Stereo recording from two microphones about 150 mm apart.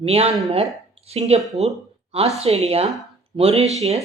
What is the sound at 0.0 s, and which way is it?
A woman's voice, 40° right (ahead or behind).